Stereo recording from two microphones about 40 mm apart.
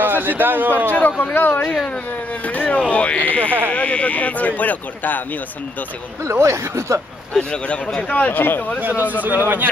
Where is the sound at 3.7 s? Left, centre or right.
Left.